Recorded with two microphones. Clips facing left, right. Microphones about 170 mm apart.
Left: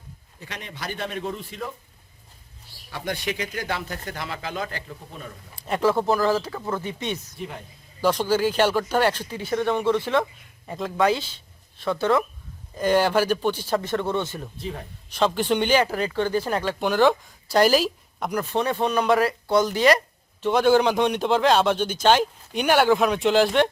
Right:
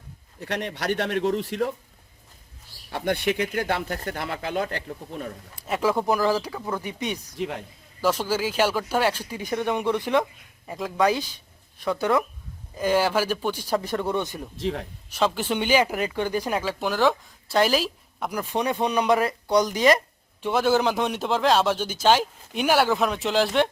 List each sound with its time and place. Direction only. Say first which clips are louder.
0.3 s a man's voice: right 8 dB; 65° right (ahead or behind)
2.9 s speech: right 5 dB; 55° right (ahead or behind)
5.6 s speech: left 2 dB; 5° right (ahead or behind)
7.3 s speech: right 5 dB; 80° right
8.0 s speech: left 3 dB; 5° right (ahead or behind)
14.5 s speech: right 5 dB; 85° right
15.1 s speech: left 2 dB; 5° right (ahead or behind)
19.5 s speech: even; centre (ahead or behind)